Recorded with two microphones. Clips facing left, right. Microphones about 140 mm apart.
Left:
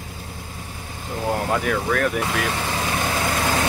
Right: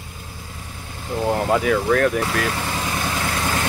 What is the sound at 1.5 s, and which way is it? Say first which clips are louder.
Speech: right 6 dB; 5° right (ahead or behind).